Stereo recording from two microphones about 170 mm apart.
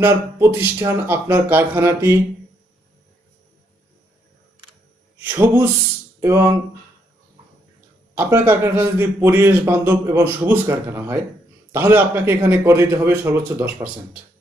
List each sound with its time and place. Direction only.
0.0 s a man's voice: 15° right (ahead or behind)
5.2 s a man's voice: 10° right (ahead or behind)
8.1 s a man's voice: 10° right (ahead or behind)